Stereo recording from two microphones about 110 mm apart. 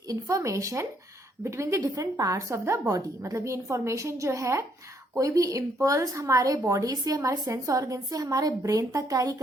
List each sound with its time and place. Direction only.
0.1 s a woman's voice: 30° right (ahead or behind)